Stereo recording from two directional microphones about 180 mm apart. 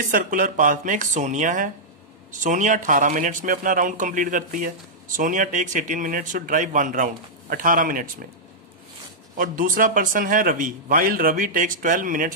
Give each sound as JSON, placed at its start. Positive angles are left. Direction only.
{"t": 0.1, "sound": "speech", "side_deg": -50}
{"t": 9.4, "sound": "speech", "side_deg": -50}